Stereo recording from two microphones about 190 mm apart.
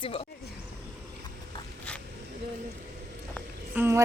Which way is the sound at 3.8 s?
15° right (ahead or behind).